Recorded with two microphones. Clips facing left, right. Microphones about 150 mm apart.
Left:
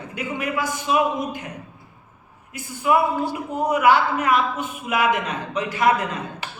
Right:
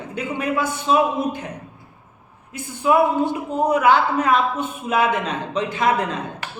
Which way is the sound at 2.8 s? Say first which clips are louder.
Right 3 dB; 30° right (ahead or behind).